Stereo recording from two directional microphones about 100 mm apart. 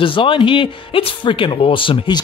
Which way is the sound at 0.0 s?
60° left (ahead or behind).